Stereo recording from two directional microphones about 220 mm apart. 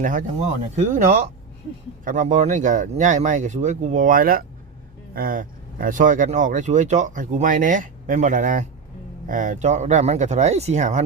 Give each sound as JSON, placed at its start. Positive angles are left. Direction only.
{"t": 0.0, "sound": "speech", "side_deg": -35}